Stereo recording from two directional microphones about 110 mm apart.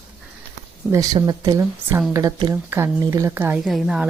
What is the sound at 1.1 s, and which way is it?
Speech, 40° right (ahead or behind).